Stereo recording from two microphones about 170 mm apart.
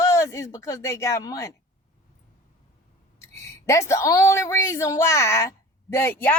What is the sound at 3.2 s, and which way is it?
Speech, 15° left (ahead or behind).